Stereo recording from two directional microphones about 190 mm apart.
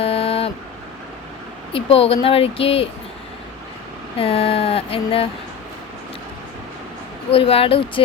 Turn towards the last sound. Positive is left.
turn(degrees=30)  # may be behind; listen again after turning